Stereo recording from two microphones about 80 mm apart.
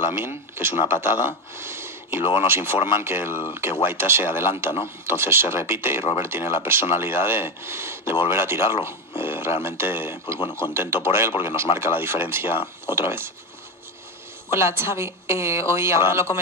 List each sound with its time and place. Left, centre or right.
0.1 s speech: right
14.5 s speech: right